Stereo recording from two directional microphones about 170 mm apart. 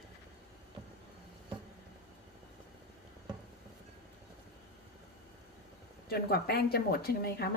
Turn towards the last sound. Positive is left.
turn(degrees=65)  # may be behind; listen again after turning